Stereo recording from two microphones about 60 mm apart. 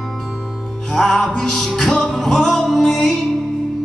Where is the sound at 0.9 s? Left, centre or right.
Centre.